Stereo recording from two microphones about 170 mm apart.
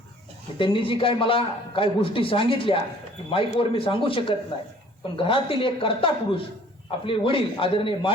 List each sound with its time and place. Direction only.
0.6 s a man's voice: 30° left (ahead or behind)